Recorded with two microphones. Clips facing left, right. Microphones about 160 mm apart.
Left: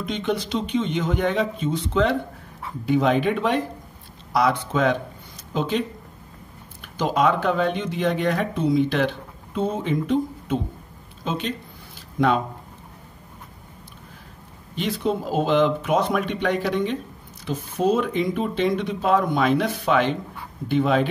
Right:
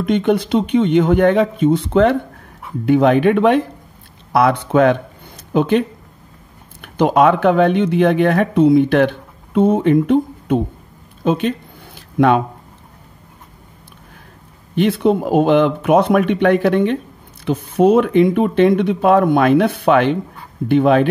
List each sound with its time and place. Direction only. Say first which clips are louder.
0.0 s speech: right 10 dB; 55° right (ahead or behind)
14.8 s speech: right 9 dB; 60° right (ahead or behind)